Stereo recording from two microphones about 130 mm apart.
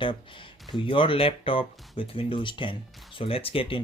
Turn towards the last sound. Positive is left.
turn(degrees=45)  # may be behind; listen again after turning